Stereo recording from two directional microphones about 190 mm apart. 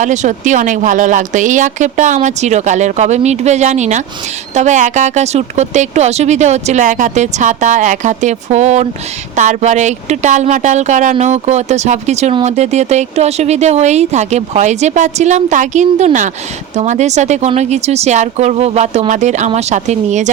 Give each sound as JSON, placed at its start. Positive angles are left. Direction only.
{"t": 0.0, "sound": "speech", "side_deg": -40}